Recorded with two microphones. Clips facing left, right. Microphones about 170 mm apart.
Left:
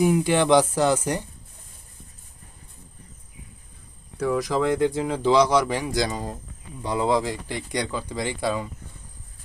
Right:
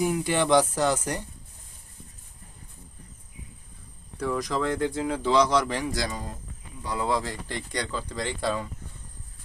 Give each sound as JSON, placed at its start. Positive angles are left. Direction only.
{"t": 0.0, "sound": "speech", "side_deg": 10}
{"t": 4.2, "sound": "speech", "side_deg": 5}
{"t": 4.9, "sound": "speech", "side_deg": 25}